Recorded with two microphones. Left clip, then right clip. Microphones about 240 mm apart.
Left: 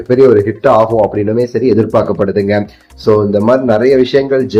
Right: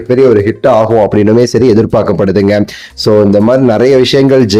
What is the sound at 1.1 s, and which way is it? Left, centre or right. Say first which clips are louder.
A man's voice: right 6 dB; right.